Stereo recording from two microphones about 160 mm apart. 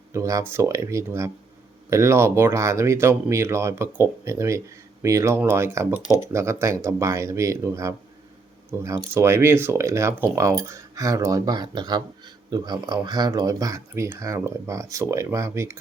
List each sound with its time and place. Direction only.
0.1 s speech: 20° right (ahead or behind)